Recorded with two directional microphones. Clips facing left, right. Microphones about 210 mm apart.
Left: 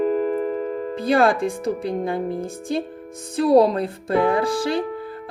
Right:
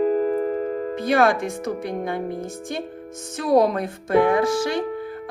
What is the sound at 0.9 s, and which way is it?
A woman's voice, 30° left (ahead or behind).